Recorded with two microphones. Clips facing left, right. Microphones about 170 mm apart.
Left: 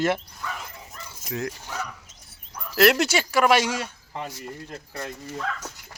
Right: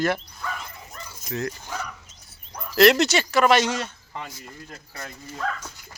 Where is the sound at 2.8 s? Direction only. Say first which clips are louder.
Right 2 dB; 10° left (ahead or behind).